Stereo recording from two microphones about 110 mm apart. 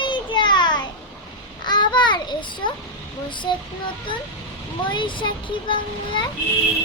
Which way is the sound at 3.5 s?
40° left (ahead or behind).